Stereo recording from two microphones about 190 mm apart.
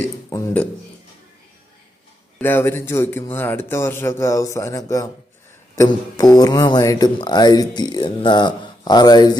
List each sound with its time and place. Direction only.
0.3 s a man's voice: 15° left (ahead or behind)
2.4 s a man's voice: 10° left (ahead or behind)